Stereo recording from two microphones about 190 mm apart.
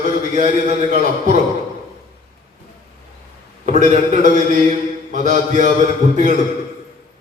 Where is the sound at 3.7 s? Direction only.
40° right (ahead or behind).